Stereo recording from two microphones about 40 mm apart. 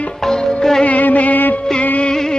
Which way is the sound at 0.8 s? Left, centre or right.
Left.